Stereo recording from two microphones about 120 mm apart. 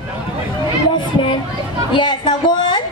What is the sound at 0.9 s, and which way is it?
A woman's voice, 40° left (ahead or behind).